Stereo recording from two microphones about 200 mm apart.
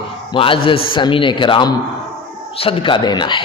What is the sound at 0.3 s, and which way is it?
A man's voice, 25° left (ahead or behind).